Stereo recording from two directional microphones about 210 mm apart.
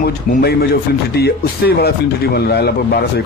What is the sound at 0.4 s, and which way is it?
Speech, 50° left (ahead or behind).